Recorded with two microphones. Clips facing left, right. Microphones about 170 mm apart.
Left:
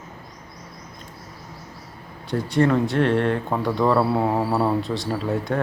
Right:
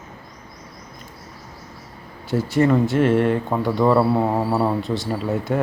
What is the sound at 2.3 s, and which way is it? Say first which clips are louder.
Speech: right 2 dB; 5° right (ahead or behind).